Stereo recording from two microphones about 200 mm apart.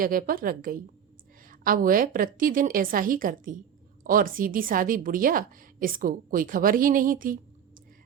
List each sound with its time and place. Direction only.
0.0 s a woman's voice: 45° right (ahead or behind)